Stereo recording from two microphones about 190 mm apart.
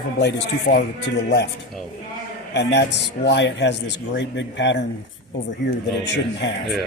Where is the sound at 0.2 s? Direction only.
60° left (ahead or behind).